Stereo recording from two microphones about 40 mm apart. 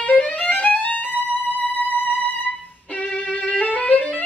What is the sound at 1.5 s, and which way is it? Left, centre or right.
Music, left.